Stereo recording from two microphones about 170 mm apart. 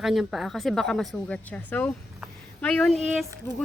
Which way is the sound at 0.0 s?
Centre (ahead or behind).